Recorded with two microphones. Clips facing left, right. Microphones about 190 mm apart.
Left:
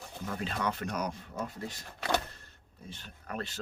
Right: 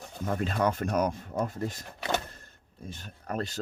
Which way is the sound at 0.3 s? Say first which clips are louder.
Right 6 dB; 45° right (ahead or behind).